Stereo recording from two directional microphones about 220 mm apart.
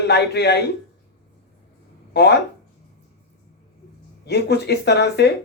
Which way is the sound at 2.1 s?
50° left (ahead or behind).